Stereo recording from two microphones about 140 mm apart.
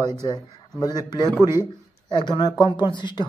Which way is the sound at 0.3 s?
30° left (ahead or behind).